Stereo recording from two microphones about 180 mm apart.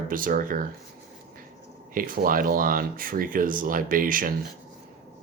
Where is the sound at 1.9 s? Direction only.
50° right (ahead or behind).